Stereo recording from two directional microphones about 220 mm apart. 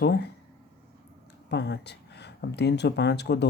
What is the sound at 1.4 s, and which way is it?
Speech, 50° left (ahead or behind).